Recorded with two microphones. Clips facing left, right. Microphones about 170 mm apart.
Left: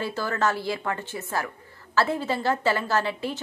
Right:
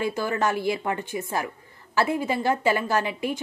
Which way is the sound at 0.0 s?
15° right (ahead or behind).